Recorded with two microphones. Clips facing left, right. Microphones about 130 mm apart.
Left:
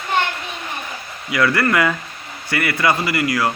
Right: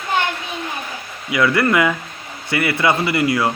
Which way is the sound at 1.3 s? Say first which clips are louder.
Right 1 dB; 20° right (ahead or behind).